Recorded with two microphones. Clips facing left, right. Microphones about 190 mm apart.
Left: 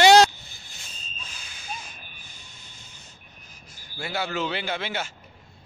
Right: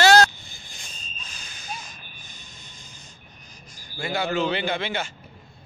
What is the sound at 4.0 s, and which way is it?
A man's voice, 5° left (ahead or behind).